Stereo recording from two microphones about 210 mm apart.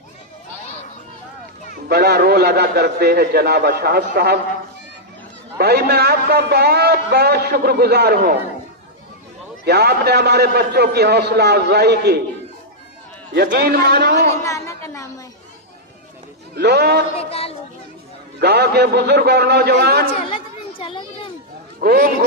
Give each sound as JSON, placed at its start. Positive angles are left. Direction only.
{"t": 1.7, "sound": "a man's voice", "side_deg": -50}
{"t": 5.5, "sound": "a man's voice", "side_deg": -50}
{"t": 9.6, "sound": "a man's voice", "side_deg": -50}
{"t": 13.3, "sound": "a man's voice", "side_deg": -50}
{"t": 14.4, "sound": "a woman's voice", "side_deg": 15}
{"t": 16.6, "sound": "a man's voice", "side_deg": -50}
{"t": 17.2, "sound": "speech", "side_deg": 30}
{"t": 18.3, "sound": "a man's voice", "side_deg": -50}
{"t": 20.1, "sound": "chatter", "side_deg": 25}
{"t": 21.8, "sound": "a man's voice", "side_deg": -45}